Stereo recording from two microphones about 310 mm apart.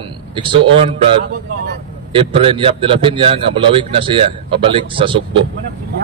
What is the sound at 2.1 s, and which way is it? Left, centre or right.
A man's voice, centre.